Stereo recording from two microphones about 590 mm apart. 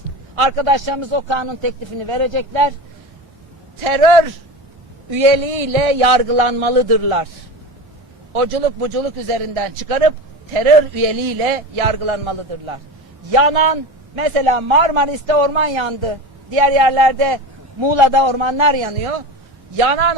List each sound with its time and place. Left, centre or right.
0.4 s a man's voice: right
3.8 s a man's voice: right
5.1 s a man's voice: right
8.3 s a man's voice: right
11.8 s a man's voice: right
16.6 s a man's voice: right